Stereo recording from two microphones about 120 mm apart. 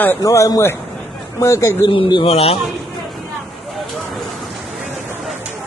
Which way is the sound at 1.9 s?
45° left (ahead or behind).